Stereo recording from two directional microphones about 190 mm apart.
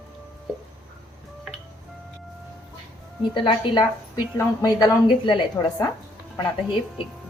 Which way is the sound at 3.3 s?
25° left (ahead or behind).